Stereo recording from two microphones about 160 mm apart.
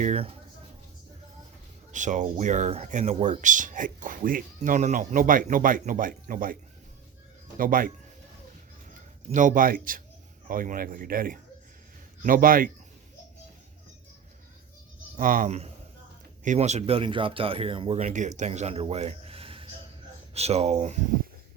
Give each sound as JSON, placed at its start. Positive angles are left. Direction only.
{"t": 0.0, "sound": "speech", "side_deg": -40}
{"t": 1.9, "sound": "a man's voice", "side_deg": -50}
{"t": 15.2, "sound": "speech", "side_deg": -60}
{"t": 15.4, "sound": "a man's voice", "side_deg": -45}